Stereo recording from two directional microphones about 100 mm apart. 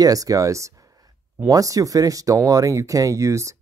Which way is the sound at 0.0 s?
35° right (ahead or behind).